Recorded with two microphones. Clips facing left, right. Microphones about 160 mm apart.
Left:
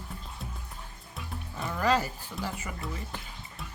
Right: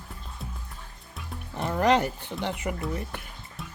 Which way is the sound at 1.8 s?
65° right (ahead or behind).